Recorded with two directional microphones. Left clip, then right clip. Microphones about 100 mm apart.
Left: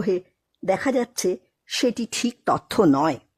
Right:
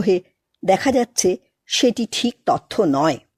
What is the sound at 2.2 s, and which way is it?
Speech, centre (ahead or behind).